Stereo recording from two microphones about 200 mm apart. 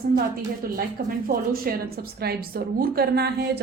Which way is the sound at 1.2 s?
45° right (ahead or behind).